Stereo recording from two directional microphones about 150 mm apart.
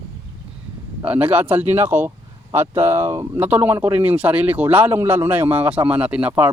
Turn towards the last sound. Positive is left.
turn(degrees=-10)  # may be behind; listen again after turning